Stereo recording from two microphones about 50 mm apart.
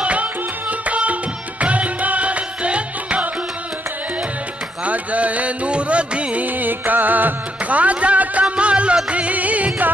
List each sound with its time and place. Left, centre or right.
0.0 s music: right
4.8 s music: right